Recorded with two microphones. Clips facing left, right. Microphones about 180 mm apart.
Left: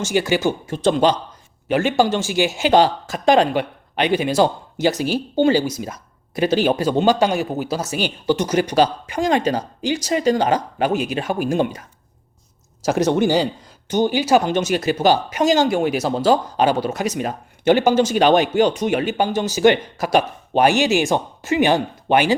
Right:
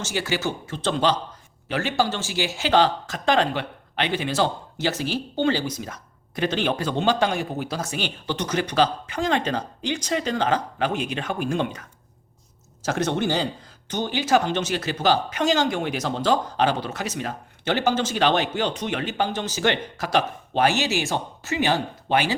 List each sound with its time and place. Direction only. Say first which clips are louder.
0.0 s speech: left 7 dB; 15° left (ahead or behind)
12.8 s speech: left 7 dB; 10° left (ahead or behind)